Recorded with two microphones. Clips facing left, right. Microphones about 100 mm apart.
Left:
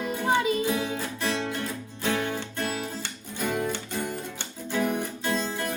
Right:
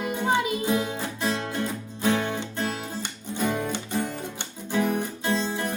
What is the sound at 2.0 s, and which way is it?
Music, 25° right (ahead or behind).